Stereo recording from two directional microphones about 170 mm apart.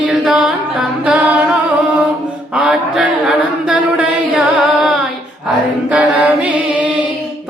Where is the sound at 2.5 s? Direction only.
5° right (ahead or behind).